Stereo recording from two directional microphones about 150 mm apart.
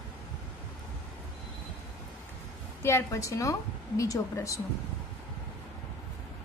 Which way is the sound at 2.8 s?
15° left (ahead or behind).